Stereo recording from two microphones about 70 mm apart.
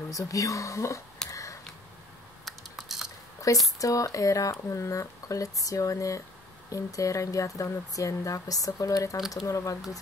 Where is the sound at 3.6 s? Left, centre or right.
Left.